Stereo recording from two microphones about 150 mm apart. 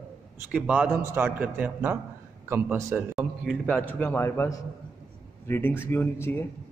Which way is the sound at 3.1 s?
Centre (ahead or behind).